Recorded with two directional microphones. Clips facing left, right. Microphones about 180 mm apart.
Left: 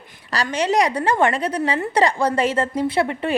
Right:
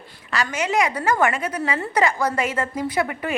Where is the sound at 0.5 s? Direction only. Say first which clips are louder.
Left 4 dB; 35° left (ahead or behind).